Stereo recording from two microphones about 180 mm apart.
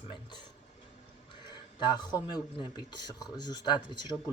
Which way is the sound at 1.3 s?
25° left (ahead or behind).